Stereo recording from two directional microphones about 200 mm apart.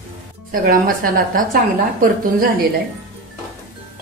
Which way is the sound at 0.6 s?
45° right (ahead or behind).